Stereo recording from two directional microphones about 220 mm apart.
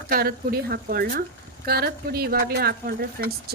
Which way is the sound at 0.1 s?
45° right (ahead or behind).